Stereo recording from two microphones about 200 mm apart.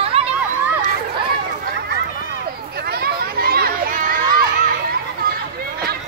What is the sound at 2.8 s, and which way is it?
Children playing, 50° right (ahead or behind).